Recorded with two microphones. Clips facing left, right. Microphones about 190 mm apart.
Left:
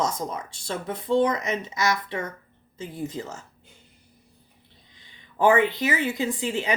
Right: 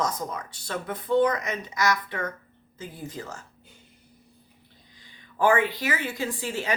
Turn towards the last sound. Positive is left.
turn(degrees=20)  # may be behind; listen again after turning